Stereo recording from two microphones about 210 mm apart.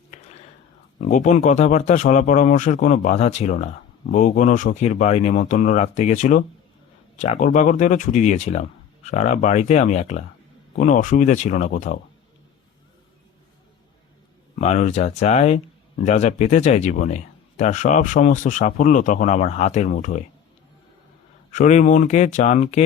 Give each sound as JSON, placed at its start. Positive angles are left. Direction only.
{"t": 1.0, "sound": "speech", "side_deg": 35}
{"t": 14.5, "sound": "speech", "side_deg": 35}
{"t": 21.5, "sound": "speech", "side_deg": 35}